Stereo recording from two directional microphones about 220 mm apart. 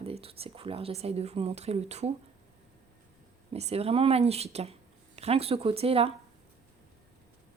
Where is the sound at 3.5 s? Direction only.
30° right (ahead or behind).